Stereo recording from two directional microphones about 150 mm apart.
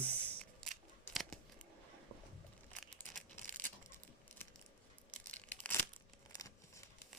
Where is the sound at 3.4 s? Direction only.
60° right (ahead or behind).